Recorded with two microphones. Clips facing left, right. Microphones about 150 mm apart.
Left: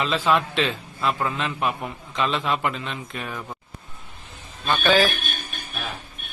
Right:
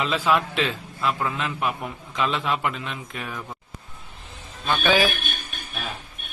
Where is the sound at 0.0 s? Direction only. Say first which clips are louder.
Left 1 dB; 10° right (ahead or behind).